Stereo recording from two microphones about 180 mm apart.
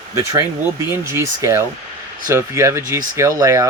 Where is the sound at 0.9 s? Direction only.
15° right (ahead or behind).